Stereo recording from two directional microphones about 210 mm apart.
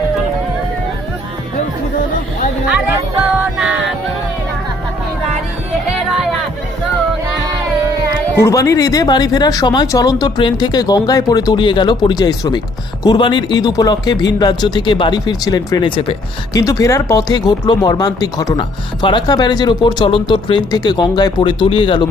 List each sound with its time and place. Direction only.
3.6 s music: centre (ahead or behind)
8.4 s speech: 15° left (ahead or behind)